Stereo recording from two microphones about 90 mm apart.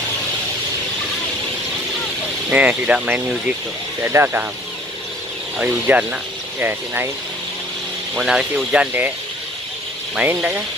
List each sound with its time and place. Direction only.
2.5 s speech: 15° right (ahead or behind)
4.0 s speech: 25° right (ahead or behind)
5.6 s speech: 15° right (ahead or behind)
8.2 s speech: 5° right (ahead or behind)
10.2 s speech: 20° right (ahead or behind)